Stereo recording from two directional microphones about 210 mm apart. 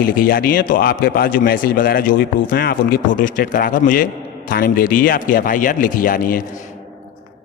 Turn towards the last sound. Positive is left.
turn(degrees=40)  # may be behind; listen again after turning